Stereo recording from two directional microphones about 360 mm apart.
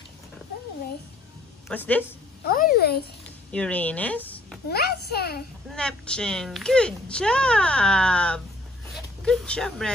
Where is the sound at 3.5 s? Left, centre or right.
Centre.